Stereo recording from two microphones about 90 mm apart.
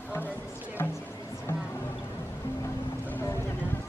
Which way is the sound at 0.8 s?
25° left (ahead or behind).